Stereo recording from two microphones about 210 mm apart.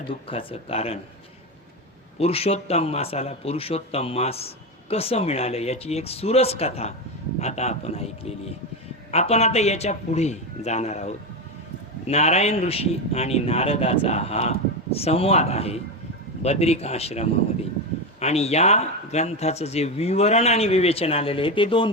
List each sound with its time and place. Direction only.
0.1 s a man's voice: 25° left (ahead or behind)
2.1 s a man's voice: 30° left (ahead or behind)